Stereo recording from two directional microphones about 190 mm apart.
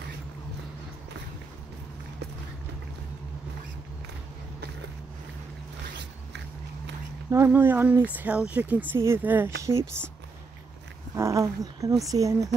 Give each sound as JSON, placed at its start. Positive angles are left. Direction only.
{"t": 7.2, "sound": "speech", "side_deg": -15}
{"t": 11.1, "sound": "speech", "side_deg": -15}